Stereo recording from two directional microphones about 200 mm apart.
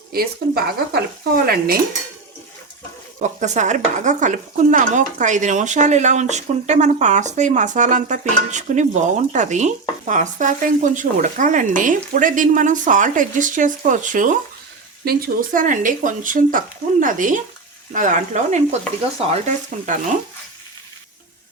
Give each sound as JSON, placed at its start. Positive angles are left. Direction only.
{"t": 0.1, "sound": "speech", "side_deg": -50}
{"t": 3.2, "sound": "speech", "side_deg": -35}